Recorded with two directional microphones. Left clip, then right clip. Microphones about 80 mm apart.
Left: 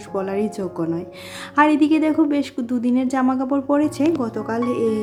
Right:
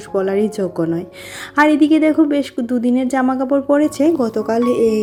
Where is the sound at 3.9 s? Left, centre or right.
Right.